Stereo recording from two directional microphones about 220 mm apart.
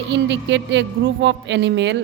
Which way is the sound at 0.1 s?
55° right (ahead or behind).